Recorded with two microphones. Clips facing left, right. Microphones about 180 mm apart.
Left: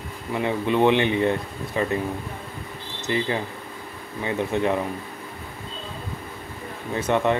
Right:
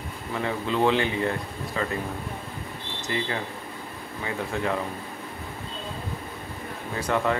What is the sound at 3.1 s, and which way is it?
Speech, 20° left (ahead or behind).